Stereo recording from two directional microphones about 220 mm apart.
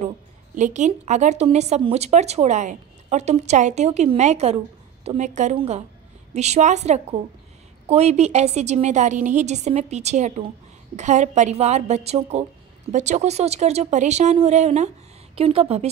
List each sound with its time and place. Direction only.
0.6 s a woman's voice: 35° right (ahead or behind)